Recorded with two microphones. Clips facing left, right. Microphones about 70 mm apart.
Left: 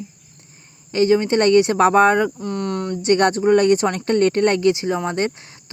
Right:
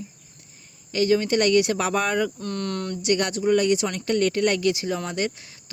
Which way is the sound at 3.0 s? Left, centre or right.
Left.